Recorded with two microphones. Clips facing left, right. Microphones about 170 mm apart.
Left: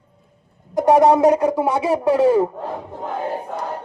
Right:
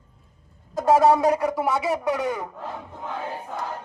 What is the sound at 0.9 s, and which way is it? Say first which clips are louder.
A man's voice: left 4 dB; 20° left (ahead or behind).